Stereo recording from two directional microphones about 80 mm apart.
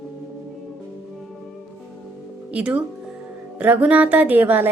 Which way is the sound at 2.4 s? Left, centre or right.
Centre.